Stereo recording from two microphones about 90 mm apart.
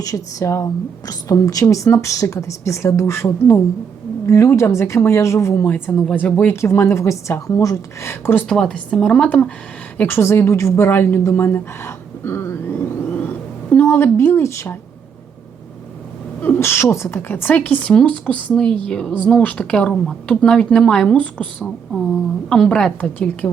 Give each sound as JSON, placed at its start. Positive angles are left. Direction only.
{"t": 0.0, "sound": "a woman's voice", "side_deg": 40}
{"t": 6.5, "sound": "a woman's voice", "side_deg": 30}
{"t": 8.4, "sound": "a woman's voice", "side_deg": 5}
{"t": 10.0, "sound": "a woman's voice", "side_deg": 25}
{"t": 13.1, "sound": "a sound", "side_deg": 25}
{"t": 16.6, "sound": "a woman's voice", "side_deg": 30}